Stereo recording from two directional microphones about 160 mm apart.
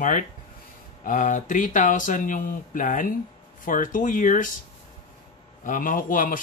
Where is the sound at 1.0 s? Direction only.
55° left (ahead or behind).